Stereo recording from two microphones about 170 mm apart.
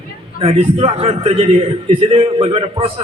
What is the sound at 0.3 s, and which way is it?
A man's voice, 35° right (ahead or behind).